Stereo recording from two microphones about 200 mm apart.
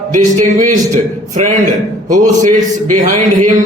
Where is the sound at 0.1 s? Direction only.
40° right (ahead or behind).